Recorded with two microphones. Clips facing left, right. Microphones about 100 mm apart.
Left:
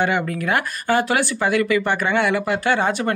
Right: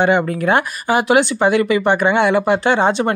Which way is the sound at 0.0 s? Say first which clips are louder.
Right 6 dB; 25° right (ahead or behind).